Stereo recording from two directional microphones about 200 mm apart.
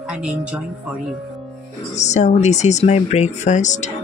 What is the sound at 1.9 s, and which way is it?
Speech, 35° left (ahead or behind).